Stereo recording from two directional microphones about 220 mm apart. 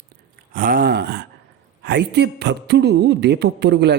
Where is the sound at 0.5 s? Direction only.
40° right (ahead or behind).